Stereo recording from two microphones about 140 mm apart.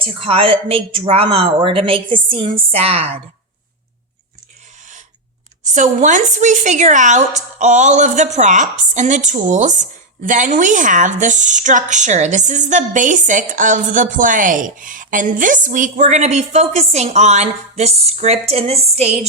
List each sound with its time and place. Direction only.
0.0 s a woman's voice: 40° right (ahead or behind)
5.6 s a woman's voice: 60° right (ahead or behind)